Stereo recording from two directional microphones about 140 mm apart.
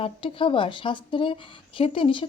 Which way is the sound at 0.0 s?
40° left (ahead or behind).